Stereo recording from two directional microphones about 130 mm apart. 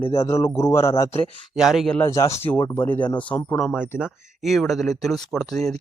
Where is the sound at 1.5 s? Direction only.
Centre (ahead or behind).